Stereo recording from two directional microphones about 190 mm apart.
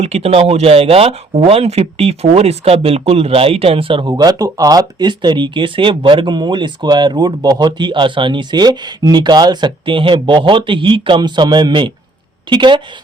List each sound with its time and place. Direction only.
0.0 s speech: 35° right (ahead or behind)